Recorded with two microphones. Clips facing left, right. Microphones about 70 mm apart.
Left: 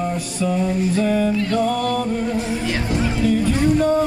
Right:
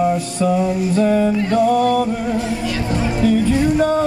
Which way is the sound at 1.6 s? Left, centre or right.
Centre.